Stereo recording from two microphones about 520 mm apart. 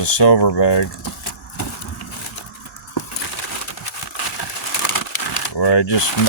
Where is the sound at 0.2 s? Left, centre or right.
Left.